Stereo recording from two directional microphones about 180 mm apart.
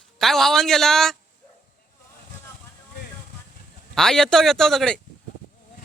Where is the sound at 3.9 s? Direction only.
5° left (ahead or behind).